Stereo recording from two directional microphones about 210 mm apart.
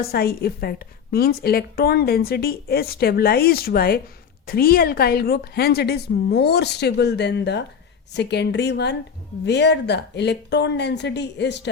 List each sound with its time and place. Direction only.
0.0 s a woman's voice: 45° left (ahead or behind)